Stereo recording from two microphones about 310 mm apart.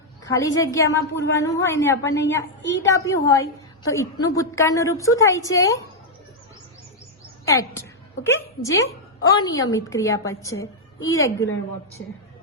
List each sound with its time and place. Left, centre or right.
0.3 s a woman's voice: centre
7.4 s a woman's voice: centre
12.0 s a woman's voice: left